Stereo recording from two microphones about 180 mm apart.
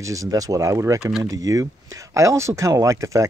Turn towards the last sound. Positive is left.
turn(degrees=-15)  # may be behind; listen again after turning